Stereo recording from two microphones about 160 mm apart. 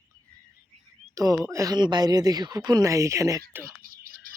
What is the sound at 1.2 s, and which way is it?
Speech, 20° right (ahead or behind).